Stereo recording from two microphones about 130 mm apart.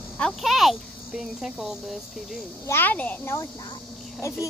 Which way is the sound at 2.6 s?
15° left (ahead or behind).